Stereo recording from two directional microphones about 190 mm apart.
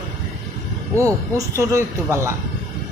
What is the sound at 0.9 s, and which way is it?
A woman's voice, 15° right (ahead or behind).